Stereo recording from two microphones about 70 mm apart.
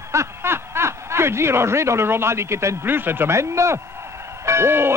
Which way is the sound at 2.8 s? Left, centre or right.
Right.